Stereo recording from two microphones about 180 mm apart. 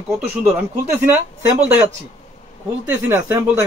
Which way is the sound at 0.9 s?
15° right (ahead or behind).